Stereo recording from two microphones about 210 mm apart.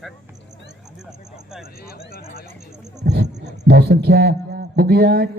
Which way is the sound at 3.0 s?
55° right (ahead or behind).